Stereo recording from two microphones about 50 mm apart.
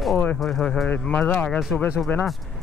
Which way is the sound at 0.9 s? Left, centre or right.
Left.